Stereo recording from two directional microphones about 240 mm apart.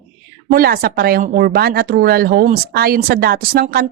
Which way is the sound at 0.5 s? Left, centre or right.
Right.